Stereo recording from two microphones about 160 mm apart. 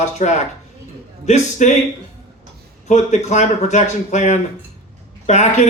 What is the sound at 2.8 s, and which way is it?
Speech, 45° left (ahead or behind).